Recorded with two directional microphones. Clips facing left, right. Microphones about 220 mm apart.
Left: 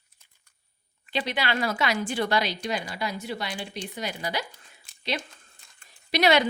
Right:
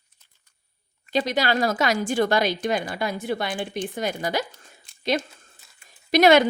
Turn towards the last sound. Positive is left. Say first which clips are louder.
# right 6 dB
turn(degrees=-50)  # may be behind; listen again after turning